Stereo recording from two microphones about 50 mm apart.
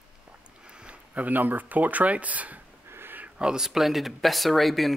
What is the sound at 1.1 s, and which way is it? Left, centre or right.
Speech, right.